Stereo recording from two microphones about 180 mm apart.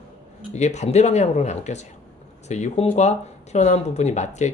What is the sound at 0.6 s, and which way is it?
Speech, 40° left (ahead or behind).